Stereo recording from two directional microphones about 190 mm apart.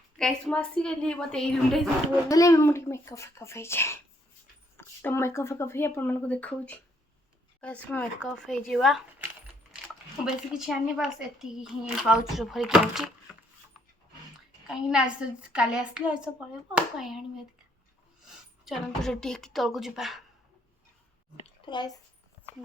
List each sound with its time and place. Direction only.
0.2 s a woman's voice: centre (ahead or behind)
2.3 s a woman's voice: 15° left (ahead or behind); by 9.0 s centre (ahead or behind)
10.2 s a woman's voice: 5° right (ahead or behind)
14.7 s a woman's voice: 5° right (ahead or behind)
18.3 s a woman's voice: centre (ahead or behind)
21.4 s a sound: 25° left (ahead or behind)